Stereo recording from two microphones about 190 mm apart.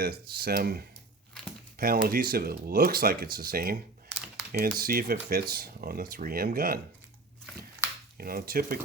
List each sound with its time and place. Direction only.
0.0 s speech: 55° right (ahead or behind)
8.2 s speech: 50° right (ahead or behind)